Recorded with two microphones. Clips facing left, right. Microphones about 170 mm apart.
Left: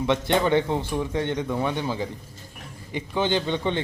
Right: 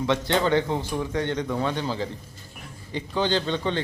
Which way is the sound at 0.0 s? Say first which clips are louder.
Left 1 dB; 20° left (ahead or behind).